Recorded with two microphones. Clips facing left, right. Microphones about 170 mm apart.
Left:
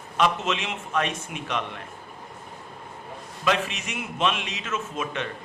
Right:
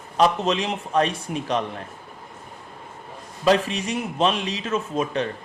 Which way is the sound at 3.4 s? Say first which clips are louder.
Right 6 dB; 35° right (ahead or behind).